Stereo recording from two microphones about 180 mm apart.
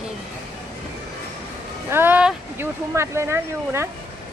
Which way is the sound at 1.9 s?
10° right (ahead or behind).